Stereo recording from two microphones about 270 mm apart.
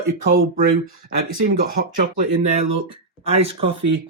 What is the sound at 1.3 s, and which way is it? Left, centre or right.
Speech, right.